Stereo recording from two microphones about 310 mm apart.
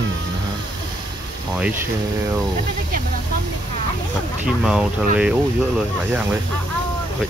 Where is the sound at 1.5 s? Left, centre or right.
Centre.